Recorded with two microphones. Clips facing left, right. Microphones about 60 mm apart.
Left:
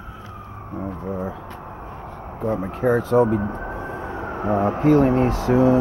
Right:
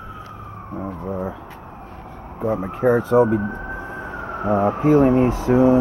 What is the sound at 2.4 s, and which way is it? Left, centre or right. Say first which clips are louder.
Speech: right 2 dB; centre.